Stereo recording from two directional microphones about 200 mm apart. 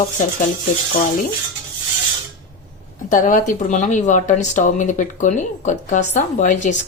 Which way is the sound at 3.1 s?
40° left (ahead or behind).